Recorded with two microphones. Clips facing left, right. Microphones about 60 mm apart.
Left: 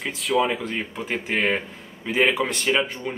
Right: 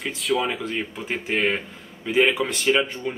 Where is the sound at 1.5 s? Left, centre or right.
Centre.